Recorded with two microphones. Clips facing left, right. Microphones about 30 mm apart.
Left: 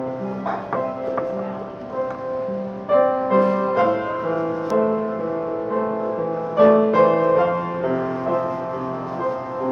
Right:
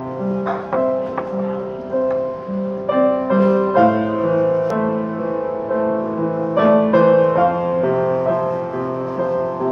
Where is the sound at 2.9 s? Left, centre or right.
Centre.